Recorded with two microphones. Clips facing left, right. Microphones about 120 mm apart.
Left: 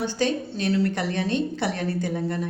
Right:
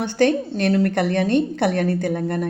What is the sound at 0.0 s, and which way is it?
A woman's voice, 60° right (ahead or behind).